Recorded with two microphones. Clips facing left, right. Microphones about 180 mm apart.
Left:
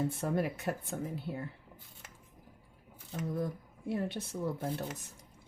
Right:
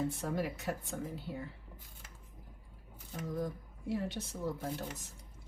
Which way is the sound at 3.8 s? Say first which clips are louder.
Left 2 dB; 55° left (ahead or behind).